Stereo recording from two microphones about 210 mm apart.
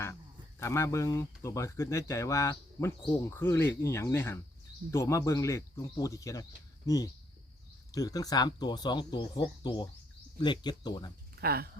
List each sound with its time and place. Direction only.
0.6 s speech: 15° left (ahead or behind)
10.4 s speech: 20° left (ahead or behind)
11.3 s speech: 45° right (ahead or behind)